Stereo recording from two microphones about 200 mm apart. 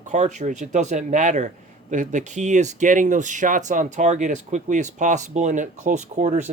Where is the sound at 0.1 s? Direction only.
35° right (ahead or behind).